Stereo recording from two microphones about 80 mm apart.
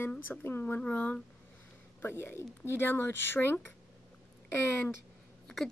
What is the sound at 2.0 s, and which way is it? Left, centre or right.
Speech, left.